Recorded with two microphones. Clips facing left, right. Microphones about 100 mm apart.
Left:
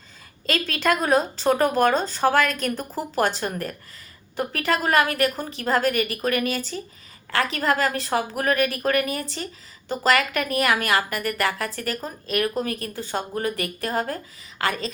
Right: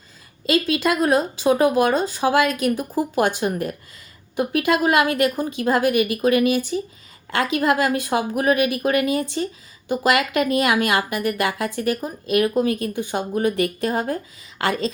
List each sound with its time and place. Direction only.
0.4 s speech: 10° right (ahead or behind); by 14.8 s 30° right (ahead or behind)